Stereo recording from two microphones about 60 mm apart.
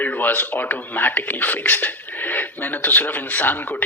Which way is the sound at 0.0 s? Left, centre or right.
Left.